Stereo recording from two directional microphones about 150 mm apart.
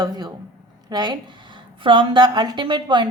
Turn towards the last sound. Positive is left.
turn(degrees=-30)  # may be behind; listen again after turning